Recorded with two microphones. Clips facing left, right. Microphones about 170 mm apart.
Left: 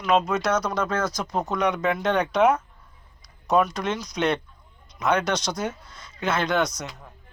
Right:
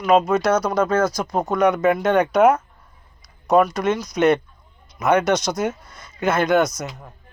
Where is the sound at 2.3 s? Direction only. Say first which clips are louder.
Right 4 dB; 40° right (ahead or behind).